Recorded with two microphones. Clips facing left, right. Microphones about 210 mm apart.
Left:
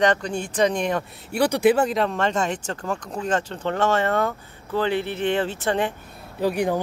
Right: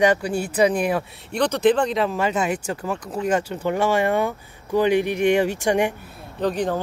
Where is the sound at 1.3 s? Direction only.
10° left (ahead or behind); by 5.9 s 15° right (ahead or behind).